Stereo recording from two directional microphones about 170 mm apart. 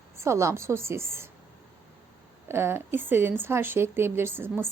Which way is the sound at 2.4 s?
15° right (ahead or behind).